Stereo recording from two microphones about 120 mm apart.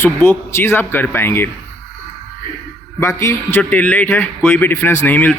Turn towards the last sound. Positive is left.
turn(degrees=15)  # may be behind; listen again after turning